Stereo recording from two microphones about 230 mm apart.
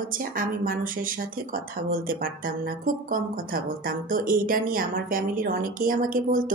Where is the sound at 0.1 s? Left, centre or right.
Right.